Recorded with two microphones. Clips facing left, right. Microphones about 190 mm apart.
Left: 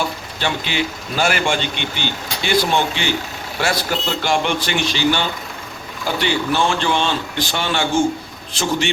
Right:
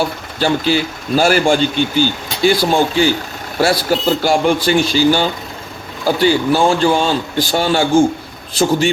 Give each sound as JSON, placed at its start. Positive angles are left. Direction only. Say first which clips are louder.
{"t": 0.3, "sound": "a man's voice", "louder": "right 8 dB", "side_deg": -35}